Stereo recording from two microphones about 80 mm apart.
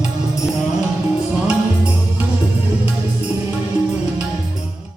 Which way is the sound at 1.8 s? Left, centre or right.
Centre.